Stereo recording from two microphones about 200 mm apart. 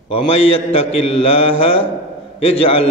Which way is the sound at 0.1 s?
30° left (ahead or behind).